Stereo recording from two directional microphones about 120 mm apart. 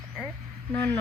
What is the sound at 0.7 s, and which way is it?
Speech, 15° left (ahead or behind).